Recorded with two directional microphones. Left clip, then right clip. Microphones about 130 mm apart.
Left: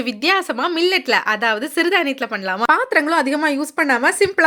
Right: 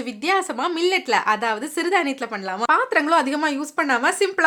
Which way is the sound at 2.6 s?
35° left (ahead or behind).